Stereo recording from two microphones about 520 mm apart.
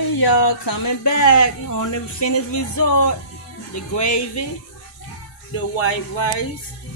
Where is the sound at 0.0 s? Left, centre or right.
Left.